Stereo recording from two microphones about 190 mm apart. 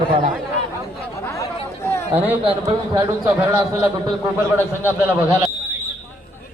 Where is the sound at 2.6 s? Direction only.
15° right (ahead or behind).